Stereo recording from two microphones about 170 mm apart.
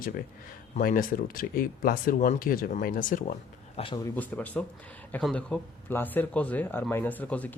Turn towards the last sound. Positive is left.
turn(degrees=10)  # may be behind; listen again after turning